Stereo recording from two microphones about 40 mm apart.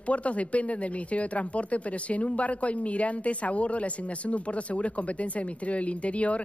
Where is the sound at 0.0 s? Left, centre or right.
Left.